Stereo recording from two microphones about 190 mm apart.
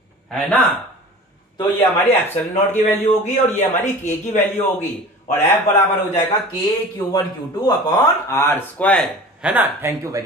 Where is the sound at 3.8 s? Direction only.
40° left (ahead or behind).